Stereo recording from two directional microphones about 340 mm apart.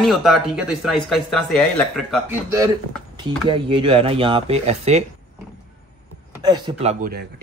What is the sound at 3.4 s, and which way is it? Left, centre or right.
Speech, centre.